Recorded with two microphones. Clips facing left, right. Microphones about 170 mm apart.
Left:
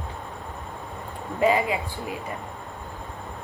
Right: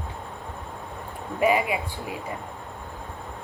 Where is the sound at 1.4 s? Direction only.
15° right (ahead or behind).